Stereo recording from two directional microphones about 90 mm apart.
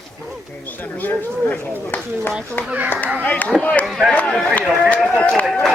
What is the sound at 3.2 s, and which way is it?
Speech, 15° left (ahead or behind).